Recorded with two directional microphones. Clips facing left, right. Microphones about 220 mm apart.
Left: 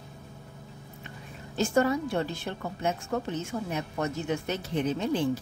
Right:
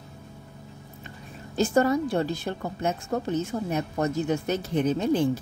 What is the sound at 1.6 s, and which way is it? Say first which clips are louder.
Speech: right 3 dB; 35° right (ahead or behind).